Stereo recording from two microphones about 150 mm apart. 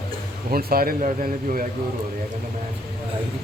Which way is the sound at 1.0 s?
60° right (ahead or behind).